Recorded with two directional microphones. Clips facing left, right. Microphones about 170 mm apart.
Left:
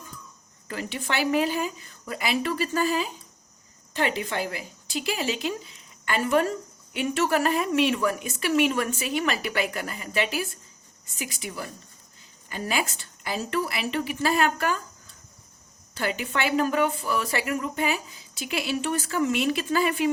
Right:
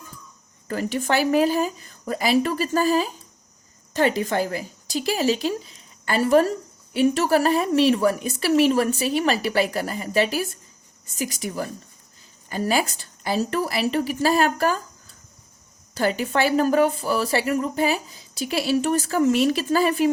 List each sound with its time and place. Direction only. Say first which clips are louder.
0.7 s a woman's voice: right 7 dB; 40° right (ahead or behind)
16.0 s speech: right 6 dB; 40° right (ahead or behind)